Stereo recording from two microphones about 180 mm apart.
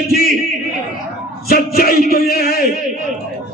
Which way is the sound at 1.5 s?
55° left (ahead or behind).